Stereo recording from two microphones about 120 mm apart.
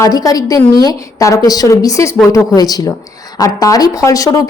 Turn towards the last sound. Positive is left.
turn(degrees=30)  # may be behind; listen again after turning